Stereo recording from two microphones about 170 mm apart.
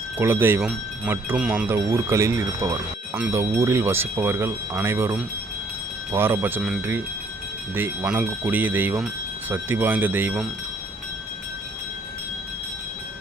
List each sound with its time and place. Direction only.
0.2 s speech: 15° right (ahead or behind)